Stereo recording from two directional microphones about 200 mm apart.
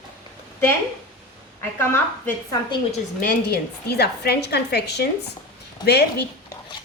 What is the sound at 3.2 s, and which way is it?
A woman's voice, 50° left (ahead or behind).